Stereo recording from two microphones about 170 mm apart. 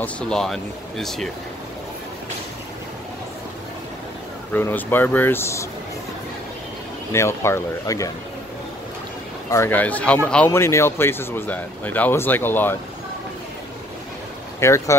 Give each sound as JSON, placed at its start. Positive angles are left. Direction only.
{"t": 0.0, "sound": "speech", "side_deg": 5}
{"t": 4.6, "sound": "speech", "side_deg": 10}
{"t": 7.1, "sound": "speech", "side_deg": 15}
{"t": 9.5, "sound": "speech", "side_deg": 15}
{"t": 14.6, "sound": "speech", "side_deg": 15}